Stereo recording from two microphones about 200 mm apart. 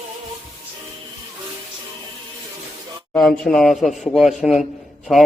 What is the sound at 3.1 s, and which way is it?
Speech, 5° left (ahead or behind).